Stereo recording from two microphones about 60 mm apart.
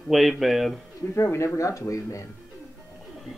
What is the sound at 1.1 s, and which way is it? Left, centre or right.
Speech, left.